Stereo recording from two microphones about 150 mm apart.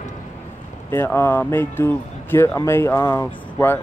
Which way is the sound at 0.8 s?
15° left (ahead or behind).